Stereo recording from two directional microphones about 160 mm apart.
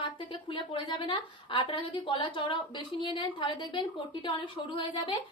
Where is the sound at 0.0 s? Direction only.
30° left (ahead or behind).